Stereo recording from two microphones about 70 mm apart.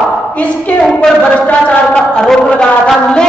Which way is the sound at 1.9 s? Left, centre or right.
Centre.